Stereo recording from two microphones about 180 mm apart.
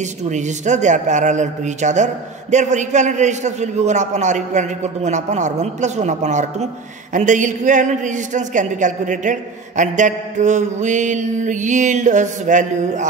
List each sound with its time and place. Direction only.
0.0 s a man's voice: 40° right (ahead or behind)